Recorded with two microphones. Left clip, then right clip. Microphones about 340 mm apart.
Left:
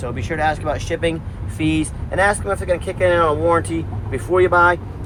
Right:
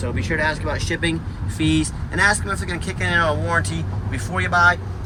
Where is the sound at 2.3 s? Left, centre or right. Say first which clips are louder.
Left 3 dB; centre.